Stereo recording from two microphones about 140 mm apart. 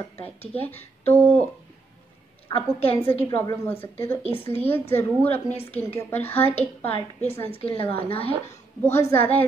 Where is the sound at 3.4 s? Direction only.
15° left (ahead or behind).